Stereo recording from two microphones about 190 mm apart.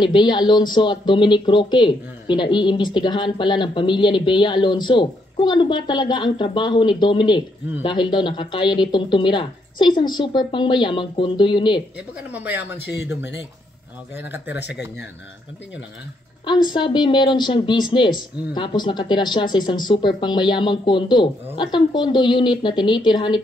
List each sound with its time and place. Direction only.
0.0 s speech: 25° left (ahead or behind)
12.2 s speech: 10° right (ahead or behind)
14.5 s speech: 65° left (ahead or behind)
16.4 s speech: 25° left (ahead or behind)